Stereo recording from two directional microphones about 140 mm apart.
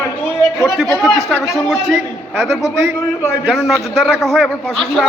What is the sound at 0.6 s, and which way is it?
A man's voice, centre (ahead or behind).